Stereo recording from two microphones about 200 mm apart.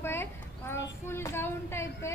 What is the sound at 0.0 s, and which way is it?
Child singing, 10° left (ahead or behind).